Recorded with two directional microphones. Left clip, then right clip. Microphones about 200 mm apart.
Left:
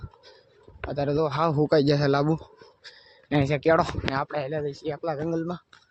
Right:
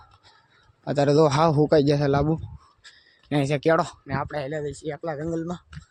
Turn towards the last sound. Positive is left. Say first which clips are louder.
# left 1 dB
turn(degrees=-5)  # may be behind; listen again after turning